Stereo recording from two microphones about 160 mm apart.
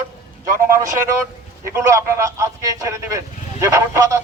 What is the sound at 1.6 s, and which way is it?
Speech, 15° right (ahead or behind).